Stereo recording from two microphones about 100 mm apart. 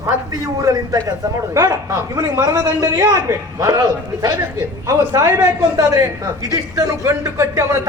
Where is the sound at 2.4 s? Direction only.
35° right (ahead or behind).